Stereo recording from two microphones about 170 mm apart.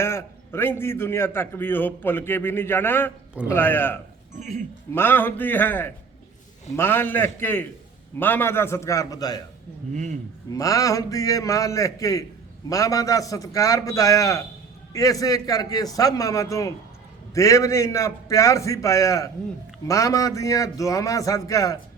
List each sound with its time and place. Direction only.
0.0 s a man's voice: 15° left (ahead or behind)
4.4 s speech: 45° right (ahead or behind)
4.9 s a man's voice: 10° left (ahead or behind)
9.9 s speech: 45° right (ahead or behind)
10.5 s a man's voice: 20° left (ahead or behind)